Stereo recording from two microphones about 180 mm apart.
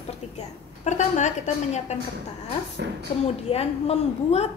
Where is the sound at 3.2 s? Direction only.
35° left (ahead or behind).